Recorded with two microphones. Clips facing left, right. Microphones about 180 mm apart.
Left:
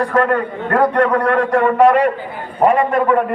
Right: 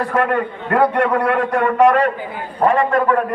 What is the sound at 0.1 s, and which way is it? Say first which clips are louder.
A man's voice: left 2 dB; 5° right (ahead or behind).